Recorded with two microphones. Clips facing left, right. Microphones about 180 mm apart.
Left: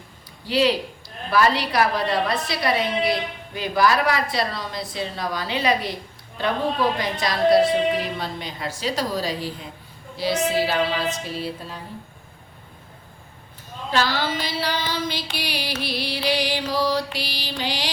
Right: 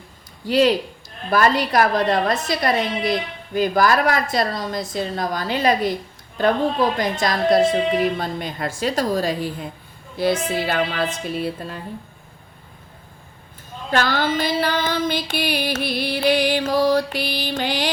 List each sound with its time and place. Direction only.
0.4 s a woman's voice: 45° right (ahead or behind)
7.0 s a woman's voice: 45° right (ahead or behind)
13.9 s a woman's voice: 50° right (ahead or behind)